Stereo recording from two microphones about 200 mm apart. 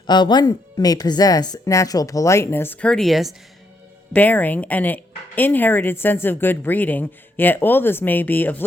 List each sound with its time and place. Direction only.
0.1 s speech: 20° left (ahead or behind)